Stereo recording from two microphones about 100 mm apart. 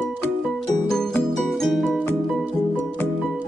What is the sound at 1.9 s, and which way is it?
Music, 15° left (ahead or behind).